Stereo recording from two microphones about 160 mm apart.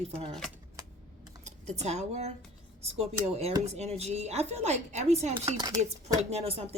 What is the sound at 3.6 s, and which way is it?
A woman's voice, 45° right (ahead or behind).